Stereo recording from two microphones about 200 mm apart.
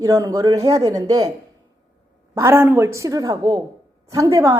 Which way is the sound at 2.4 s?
10° right (ahead or behind).